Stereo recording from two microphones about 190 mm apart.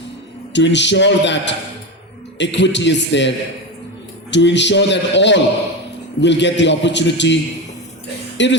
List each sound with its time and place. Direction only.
0.5 s a man's voice: 70° left (ahead or behind)
8.4 s a man's voice: 70° left (ahead or behind)